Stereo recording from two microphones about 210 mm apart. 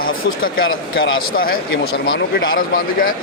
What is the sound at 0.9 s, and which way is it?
Speech, 60° left (ahead or behind).